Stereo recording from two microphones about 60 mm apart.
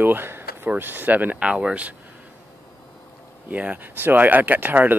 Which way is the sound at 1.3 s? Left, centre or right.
Centre.